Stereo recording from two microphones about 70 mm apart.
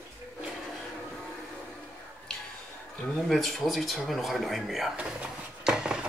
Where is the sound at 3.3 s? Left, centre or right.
Centre.